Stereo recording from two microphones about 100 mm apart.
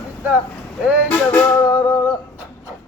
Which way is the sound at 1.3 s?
40° left (ahead or behind).